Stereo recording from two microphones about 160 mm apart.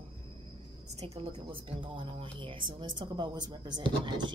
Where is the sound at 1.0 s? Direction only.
40° right (ahead or behind).